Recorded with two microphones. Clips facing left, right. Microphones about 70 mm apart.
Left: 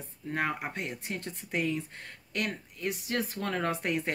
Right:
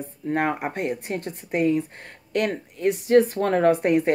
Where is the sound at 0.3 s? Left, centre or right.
Right.